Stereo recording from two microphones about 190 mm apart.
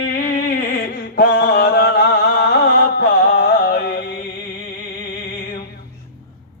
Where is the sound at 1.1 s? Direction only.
65° left (ahead or behind).